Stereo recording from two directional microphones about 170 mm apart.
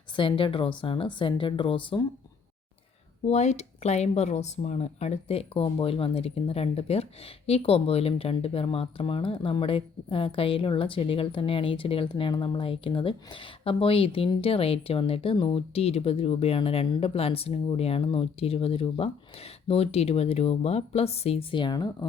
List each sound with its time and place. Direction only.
0.2 s speech: 30° left (ahead or behind)
3.2 s speech: 40° left (ahead or behind); by 21.8 s 25° left (ahead or behind)